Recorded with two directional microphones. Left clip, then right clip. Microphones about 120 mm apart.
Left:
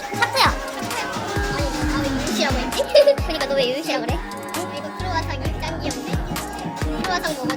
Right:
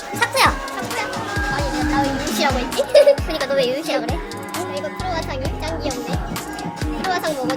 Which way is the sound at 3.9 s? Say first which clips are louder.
Right 2 dB; 5° right (ahead or behind).